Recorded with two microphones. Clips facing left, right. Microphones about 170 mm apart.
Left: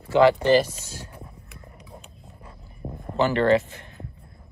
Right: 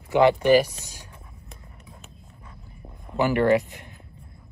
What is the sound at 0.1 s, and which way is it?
Speech, 20° right (ahead or behind).